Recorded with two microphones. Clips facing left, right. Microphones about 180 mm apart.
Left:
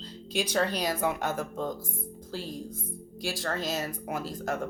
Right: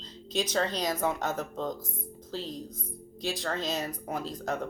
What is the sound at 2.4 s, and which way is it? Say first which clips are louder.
Speech: even; 25° right (ahead or behind).